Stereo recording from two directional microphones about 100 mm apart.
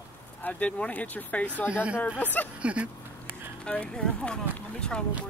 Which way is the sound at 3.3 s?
20° right (ahead or behind).